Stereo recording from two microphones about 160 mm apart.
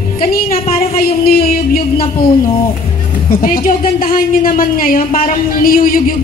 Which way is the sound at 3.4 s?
60° left (ahead or behind).